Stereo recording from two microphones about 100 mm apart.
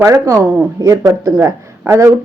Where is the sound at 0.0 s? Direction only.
30° right (ahead or behind).